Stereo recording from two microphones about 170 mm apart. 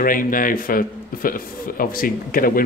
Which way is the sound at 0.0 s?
55° left (ahead or behind).